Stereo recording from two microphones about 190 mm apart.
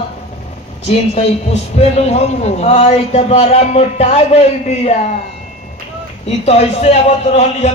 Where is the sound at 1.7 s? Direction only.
35° left (ahead or behind).